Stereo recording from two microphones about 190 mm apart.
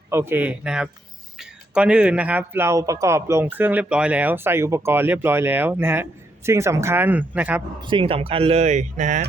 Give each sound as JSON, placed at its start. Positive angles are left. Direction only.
{"t": 0.1, "sound": "a man's voice", "side_deg": -15}
{"t": 7.8, "sound": "speech", "side_deg": -25}